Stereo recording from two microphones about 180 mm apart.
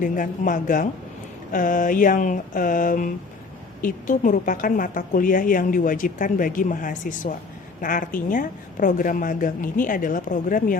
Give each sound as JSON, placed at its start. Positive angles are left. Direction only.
{"t": 0.0, "sound": "a woman's voice", "side_deg": 45}